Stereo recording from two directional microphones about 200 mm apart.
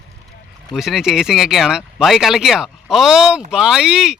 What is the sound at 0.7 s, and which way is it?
Speech, centre (ahead or behind).